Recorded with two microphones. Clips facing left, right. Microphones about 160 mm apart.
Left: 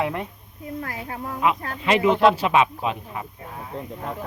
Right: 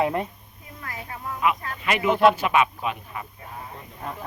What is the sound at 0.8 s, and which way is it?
Speech, 50° left (ahead or behind).